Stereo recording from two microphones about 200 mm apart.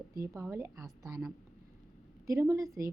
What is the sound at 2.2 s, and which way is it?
Speech, 15° right (ahead or behind).